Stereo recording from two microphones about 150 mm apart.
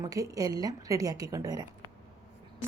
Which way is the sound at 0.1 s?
25° right (ahead or behind).